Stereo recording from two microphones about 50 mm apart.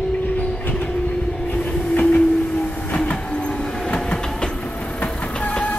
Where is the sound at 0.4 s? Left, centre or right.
Left.